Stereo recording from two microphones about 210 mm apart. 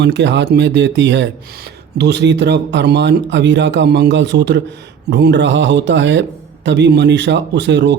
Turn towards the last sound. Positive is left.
turn(degrees=-55)  # may be behind; listen again after turning